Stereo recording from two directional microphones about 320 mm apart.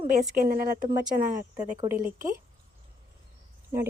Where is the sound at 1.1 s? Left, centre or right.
Centre.